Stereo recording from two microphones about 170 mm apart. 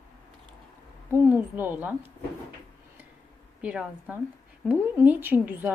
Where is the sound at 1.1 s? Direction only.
10° right (ahead or behind).